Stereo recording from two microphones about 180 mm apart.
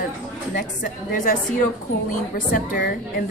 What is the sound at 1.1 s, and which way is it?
Speech, 45° left (ahead or behind).